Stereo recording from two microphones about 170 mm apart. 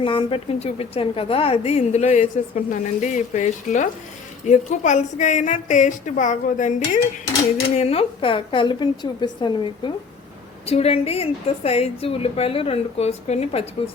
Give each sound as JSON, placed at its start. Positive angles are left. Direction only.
{"t": 0.0, "sound": "a woman's voice", "side_deg": 30}
{"t": 7.8, "sound": "a woman's voice", "side_deg": 35}